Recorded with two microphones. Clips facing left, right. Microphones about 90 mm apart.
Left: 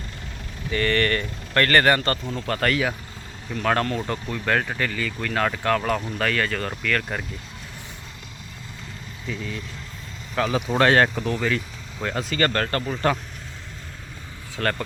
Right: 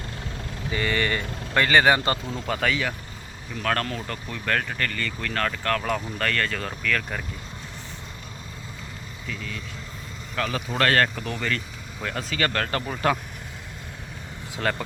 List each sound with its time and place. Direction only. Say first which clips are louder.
0.7 s speech: left 3 dB; 10° right (ahead or behind); by 5.8 s 10° left (ahead or behind)
5.8 s speech: left 2 dB; centre (ahead or behind)
10.3 s speech: left 5 dB; 10° left (ahead or behind)
11.2 s speech: left 4 dB; 5° left (ahead or behind)
14.5 s speech: left 1 dB; 10° right (ahead or behind)